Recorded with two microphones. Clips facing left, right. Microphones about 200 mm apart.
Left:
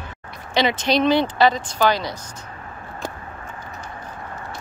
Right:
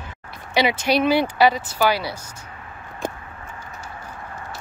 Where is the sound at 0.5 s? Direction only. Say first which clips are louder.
Even; 10° right (ahead or behind).